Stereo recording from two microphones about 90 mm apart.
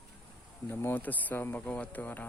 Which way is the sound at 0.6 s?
20° left (ahead or behind).